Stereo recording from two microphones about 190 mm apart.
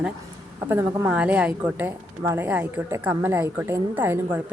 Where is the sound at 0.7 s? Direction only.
10° right (ahead or behind).